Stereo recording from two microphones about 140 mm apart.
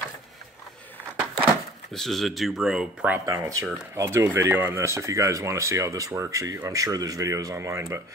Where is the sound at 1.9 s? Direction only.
Centre (ahead or behind).